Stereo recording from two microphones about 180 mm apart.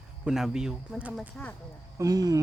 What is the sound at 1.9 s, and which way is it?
Speech, 20° right (ahead or behind).